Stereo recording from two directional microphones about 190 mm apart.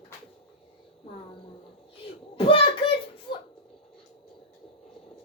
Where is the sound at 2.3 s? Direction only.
30° left (ahead or behind).